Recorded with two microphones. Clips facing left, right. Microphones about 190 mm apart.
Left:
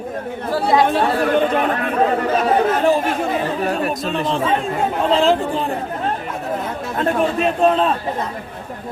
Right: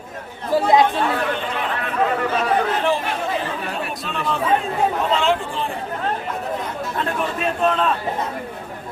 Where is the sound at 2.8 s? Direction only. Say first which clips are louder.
Left 5 dB; 40° left (ahead or behind).